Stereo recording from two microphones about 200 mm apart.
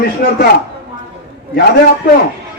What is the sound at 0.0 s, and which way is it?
Speech, 50° left (ahead or behind).